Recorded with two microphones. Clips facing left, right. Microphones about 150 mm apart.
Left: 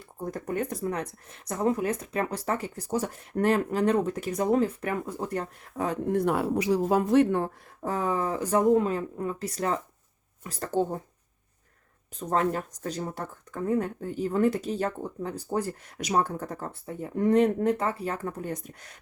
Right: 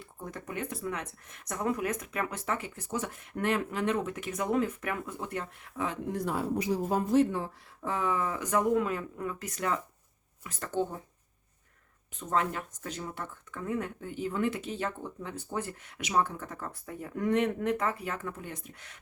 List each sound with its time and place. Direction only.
0.0 s speech: 40° left (ahead or behind)
6.1 s a woman's voice: 65° left (ahead or behind)
7.8 s speech: 40° left (ahead or behind)
12.3 s speech: 40° left (ahead or behind)